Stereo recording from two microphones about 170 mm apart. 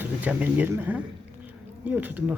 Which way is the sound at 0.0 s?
10° right (ahead or behind).